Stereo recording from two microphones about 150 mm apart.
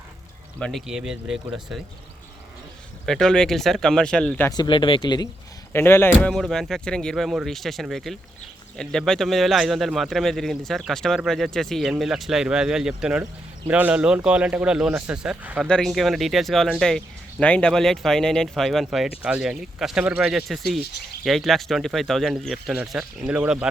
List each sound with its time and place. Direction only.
0.6 s speech: centre (ahead or behind)
3.1 s speech: 5° left (ahead or behind)
4.4 s speech: 30° left (ahead or behind)
5.7 s speech: 15° left (ahead or behind); by 23.6 s 5° right (ahead or behind)